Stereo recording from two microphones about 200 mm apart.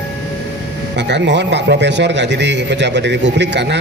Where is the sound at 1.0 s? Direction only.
60° right (ahead or behind).